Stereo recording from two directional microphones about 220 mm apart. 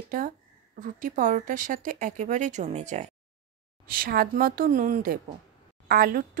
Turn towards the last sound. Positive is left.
turn(degrees=-40)  # may be behind; listen again after turning